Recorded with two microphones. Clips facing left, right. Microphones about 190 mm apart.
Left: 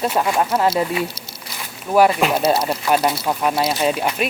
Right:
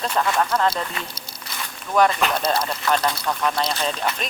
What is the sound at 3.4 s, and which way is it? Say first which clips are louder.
Speech: left 5 dB; 10° left (ahead or behind).